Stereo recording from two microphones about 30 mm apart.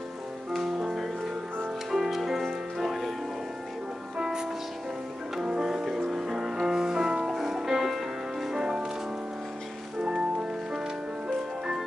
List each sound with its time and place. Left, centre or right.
0.8 s music: centre
4.2 s music: right
5.9 s music: centre
8.5 s music: right
10.0 s music: right